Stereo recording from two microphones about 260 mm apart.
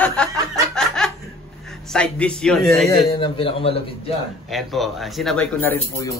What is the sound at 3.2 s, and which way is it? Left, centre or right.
Speech, centre.